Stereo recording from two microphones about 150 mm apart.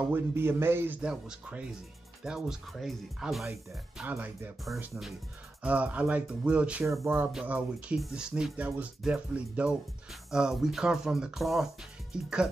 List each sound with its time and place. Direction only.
0.0 s speech: 15° right (ahead or behind)
4.0 s speech: 15° right (ahead or behind)
6.8 s speech: 20° right (ahead or behind)